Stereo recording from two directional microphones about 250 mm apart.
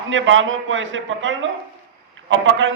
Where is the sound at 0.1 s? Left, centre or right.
Right.